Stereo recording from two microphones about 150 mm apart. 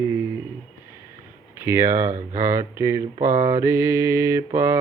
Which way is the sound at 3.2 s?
60° right (ahead or behind).